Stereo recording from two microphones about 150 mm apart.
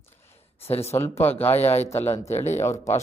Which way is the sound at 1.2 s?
15° left (ahead or behind).